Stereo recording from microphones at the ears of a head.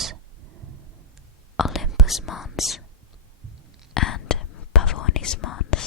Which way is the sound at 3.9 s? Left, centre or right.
Left.